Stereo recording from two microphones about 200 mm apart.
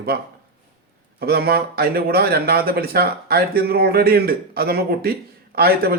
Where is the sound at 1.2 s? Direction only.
50° right (ahead or behind).